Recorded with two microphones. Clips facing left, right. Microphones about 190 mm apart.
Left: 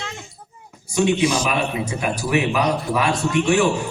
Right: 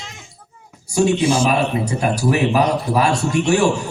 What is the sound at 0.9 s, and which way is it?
A man's voice, 40° right (ahead or behind).